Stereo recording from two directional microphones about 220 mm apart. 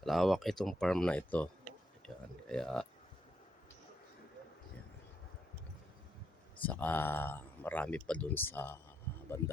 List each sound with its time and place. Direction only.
0.0 s speech: centre (ahead or behind)
2.0 s a sound: centre (ahead or behind)
2.5 s speech: 5° left (ahead or behind)
6.6 s speech: 5° left (ahead or behind)